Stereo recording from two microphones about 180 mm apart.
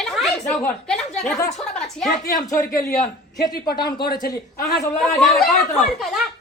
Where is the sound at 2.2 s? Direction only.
20° left (ahead or behind).